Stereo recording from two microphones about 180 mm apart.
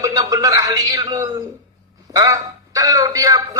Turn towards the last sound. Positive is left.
turn(degrees=-20)  # may be behind; listen again after turning